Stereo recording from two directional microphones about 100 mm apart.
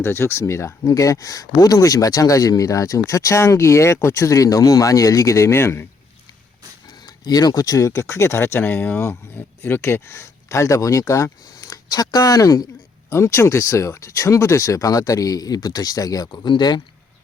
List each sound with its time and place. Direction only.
0.0 s speech: 25° left (ahead or behind)
6.8 s speech: 45° left (ahead or behind)